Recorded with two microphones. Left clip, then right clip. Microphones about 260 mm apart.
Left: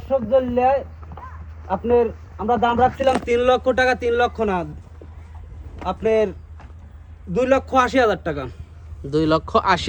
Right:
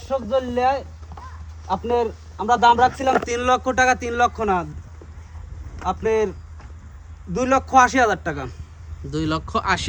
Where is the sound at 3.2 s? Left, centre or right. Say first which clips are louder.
Left 3 dB; centre.